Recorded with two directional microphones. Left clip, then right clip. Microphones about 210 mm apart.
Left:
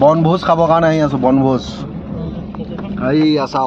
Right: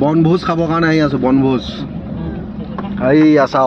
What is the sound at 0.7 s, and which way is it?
Speech, 65° left (ahead or behind).